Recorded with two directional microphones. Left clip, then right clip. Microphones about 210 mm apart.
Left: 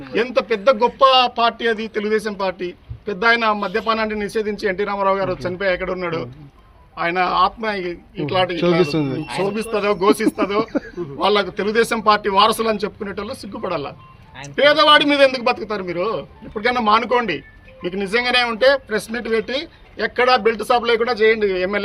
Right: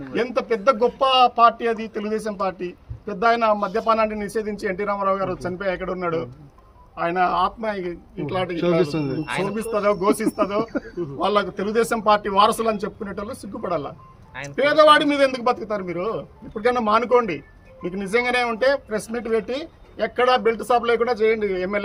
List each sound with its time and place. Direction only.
0.1 s speech: centre (ahead or behind)
8.8 s a man's voice: 45° left (ahead or behind)
9.2 s speech: centre (ahead or behind)